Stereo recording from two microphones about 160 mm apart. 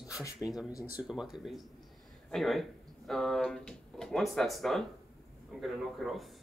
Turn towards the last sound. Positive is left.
turn(degrees=0)  # may be behind; listen again after turning